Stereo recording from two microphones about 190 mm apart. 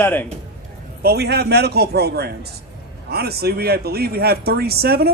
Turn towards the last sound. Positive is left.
turn(degrees=-55)  # may be behind; listen again after turning